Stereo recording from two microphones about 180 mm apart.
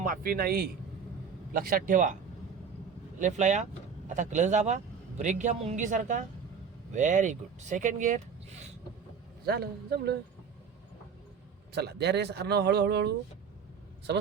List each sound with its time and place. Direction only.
0.0 s a man's voice: 50° right (ahead or behind)
3.2 s a man's voice: 45° right (ahead or behind)
9.5 s a man's voice: 65° right (ahead or behind)
11.7 s speech: 65° right (ahead or behind)